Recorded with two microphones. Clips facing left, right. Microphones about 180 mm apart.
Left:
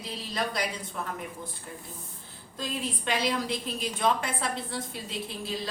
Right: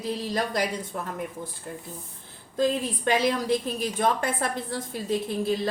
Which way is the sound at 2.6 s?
45° right (ahead or behind).